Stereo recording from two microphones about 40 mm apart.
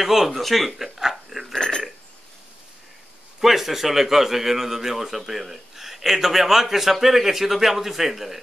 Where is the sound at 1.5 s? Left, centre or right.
Centre.